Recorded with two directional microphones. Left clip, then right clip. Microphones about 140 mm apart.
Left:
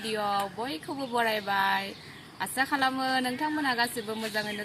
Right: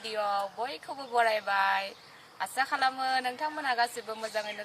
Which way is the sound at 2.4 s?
30° right (ahead or behind).